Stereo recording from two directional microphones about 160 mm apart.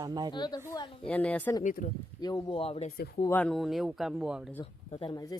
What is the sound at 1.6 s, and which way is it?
Speech, 55° left (ahead or behind).